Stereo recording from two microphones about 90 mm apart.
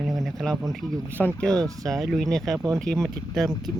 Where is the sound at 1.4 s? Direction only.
5° left (ahead or behind).